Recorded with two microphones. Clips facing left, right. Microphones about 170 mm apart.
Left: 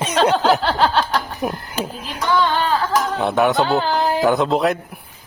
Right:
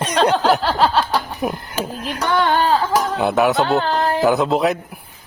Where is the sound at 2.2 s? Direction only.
60° right (ahead or behind).